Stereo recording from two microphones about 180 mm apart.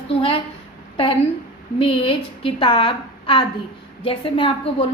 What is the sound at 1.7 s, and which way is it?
A woman's voice, 30° left (ahead or behind).